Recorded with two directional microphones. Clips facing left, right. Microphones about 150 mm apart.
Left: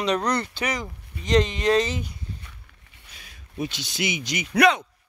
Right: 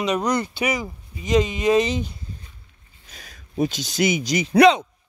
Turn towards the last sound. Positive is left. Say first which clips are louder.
# right 5 dB
turn(degrees=-25)  # may be behind; listen again after turning